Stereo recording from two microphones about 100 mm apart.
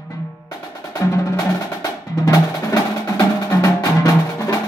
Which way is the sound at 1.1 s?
35° left (ahead or behind).